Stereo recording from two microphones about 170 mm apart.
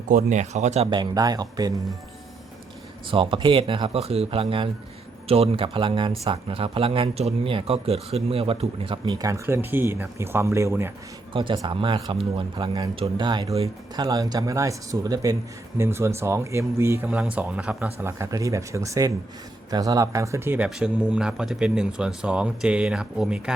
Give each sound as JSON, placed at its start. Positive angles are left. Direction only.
{"t": 0.1, "sound": "speech", "side_deg": -45}
{"t": 0.9, "sound": "speech", "side_deg": -25}
{"t": 3.1, "sound": "speech", "side_deg": -30}
{"t": 11.3, "sound": "speech", "side_deg": -25}
{"t": 18.0, "sound": "speech", "side_deg": -20}